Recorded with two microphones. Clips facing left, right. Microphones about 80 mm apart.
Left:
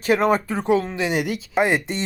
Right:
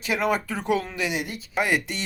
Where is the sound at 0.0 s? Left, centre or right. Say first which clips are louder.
Left 6 dB; left.